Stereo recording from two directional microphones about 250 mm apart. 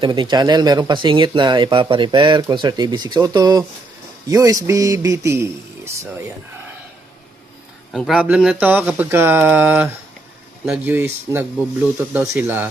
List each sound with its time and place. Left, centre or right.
0.0 s speech: centre
7.9 s speech: centre